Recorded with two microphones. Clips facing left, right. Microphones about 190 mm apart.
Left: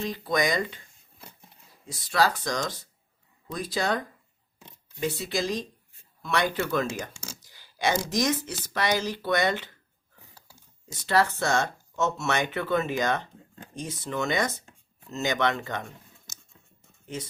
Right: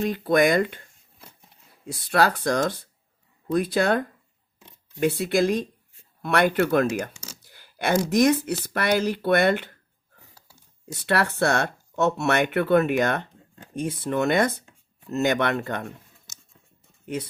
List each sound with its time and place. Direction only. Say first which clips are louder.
0.0 s speech: right 7 dB; 55° right (ahead or behind)
1.9 s speech: right 3 dB; 60° right (ahead or behind)
10.8 s speech: even; 65° right (ahead or behind)